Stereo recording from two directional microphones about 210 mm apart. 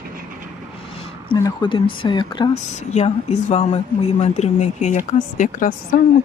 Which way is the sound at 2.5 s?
35° left (ahead or behind).